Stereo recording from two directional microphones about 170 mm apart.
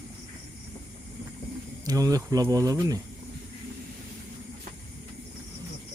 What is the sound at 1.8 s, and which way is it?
Speech, 20° right (ahead or behind).